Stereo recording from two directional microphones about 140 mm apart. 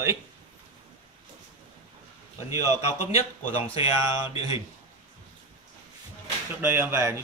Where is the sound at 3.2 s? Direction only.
45° left (ahead or behind).